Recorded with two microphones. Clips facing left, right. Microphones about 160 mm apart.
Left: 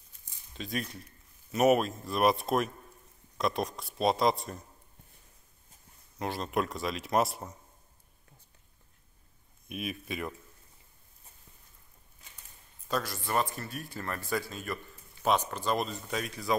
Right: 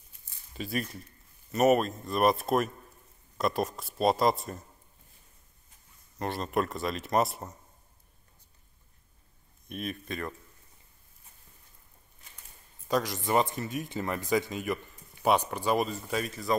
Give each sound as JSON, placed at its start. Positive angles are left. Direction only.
{"t": 0.5, "sound": "speech", "side_deg": -5}
{"t": 6.1, "sound": "speech", "side_deg": 0}
{"t": 9.7, "sound": "speech", "side_deg": 5}
{"t": 12.8, "sound": "speech", "side_deg": -15}